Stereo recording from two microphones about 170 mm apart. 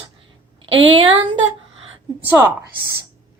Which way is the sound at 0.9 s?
30° right (ahead or behind).